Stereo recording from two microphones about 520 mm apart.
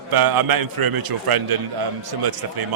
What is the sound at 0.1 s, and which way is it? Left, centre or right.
A man's voice, right.